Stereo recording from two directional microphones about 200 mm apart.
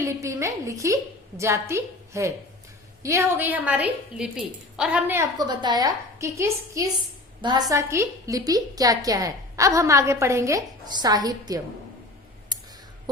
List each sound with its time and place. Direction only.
0.0 s a woman's voice: 15° right (ahead or behind)